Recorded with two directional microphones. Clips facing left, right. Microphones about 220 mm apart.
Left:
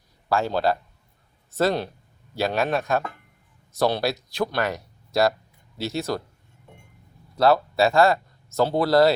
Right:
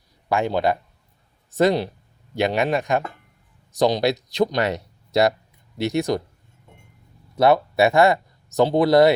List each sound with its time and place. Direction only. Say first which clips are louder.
0.3 s speech: right 2 dB; 15° right (ahead or behind)
7.3 s speech: right 2 dB; 20° right (ahead or behind)